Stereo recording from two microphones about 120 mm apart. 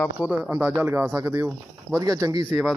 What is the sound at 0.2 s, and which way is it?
Speech, 10° right (ahead or behind).